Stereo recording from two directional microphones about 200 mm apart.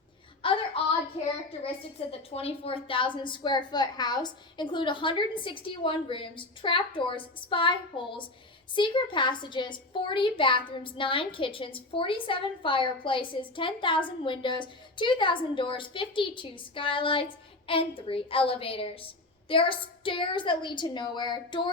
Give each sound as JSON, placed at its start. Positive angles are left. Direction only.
{"t": 0.4, "sound": "child singing", "side_deg": 25}
{"t": 1.6, "sound": "a woman's voice", "side_deg": 30}